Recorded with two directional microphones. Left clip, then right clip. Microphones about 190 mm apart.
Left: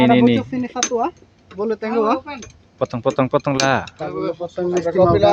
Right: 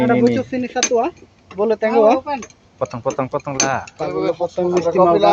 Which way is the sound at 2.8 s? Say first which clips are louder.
Left 2 dB; 55° left (ahead or behind).